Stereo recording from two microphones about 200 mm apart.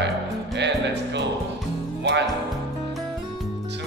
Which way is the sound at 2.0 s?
60° right (ahead or behind).